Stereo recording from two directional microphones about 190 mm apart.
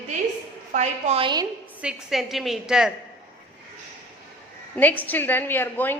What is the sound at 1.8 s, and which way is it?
A woman's voice, 5° right (ahead or behind).